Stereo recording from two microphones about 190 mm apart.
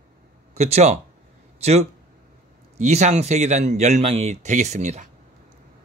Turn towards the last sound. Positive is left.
turn(degrees=-40)  # may be behind; listen again after turning